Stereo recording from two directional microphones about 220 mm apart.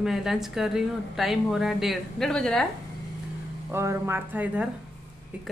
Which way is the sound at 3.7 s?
10° right (ahead or behind).